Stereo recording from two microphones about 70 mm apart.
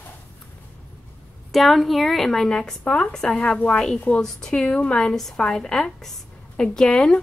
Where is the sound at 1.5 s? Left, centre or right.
Centre.